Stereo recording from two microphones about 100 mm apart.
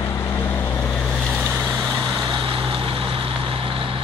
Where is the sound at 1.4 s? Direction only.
20° right (ahead or behind).